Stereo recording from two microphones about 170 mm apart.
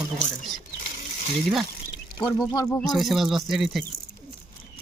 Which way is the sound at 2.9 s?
Centre (ahead or behind).